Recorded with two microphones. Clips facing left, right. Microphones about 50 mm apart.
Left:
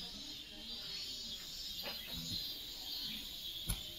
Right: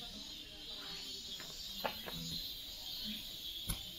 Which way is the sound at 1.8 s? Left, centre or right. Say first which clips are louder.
Right 6 dB; right.